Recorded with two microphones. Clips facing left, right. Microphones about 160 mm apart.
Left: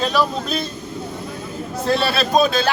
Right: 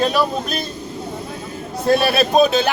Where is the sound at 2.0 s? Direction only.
20° right (ahead or behind).